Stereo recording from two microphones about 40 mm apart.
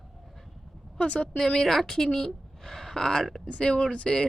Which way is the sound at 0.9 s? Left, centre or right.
Left.